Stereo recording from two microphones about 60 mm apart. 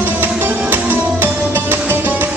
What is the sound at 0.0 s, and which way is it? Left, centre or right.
Music, right.